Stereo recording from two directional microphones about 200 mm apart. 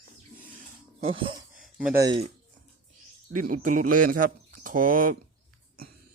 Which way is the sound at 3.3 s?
40° right (ahead or behind).